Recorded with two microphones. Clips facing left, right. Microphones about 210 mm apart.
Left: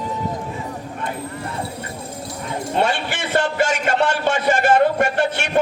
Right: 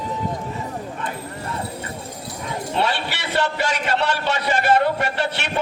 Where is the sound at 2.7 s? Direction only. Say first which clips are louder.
Left 3 dB; 50° left (ahead or behind).